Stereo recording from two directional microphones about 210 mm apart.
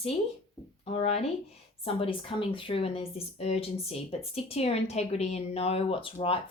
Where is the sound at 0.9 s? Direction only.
30° left (ahead or behind).